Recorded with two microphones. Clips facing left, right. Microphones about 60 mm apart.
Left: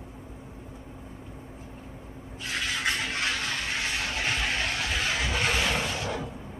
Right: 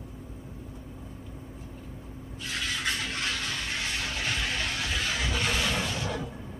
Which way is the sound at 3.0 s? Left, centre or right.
Left.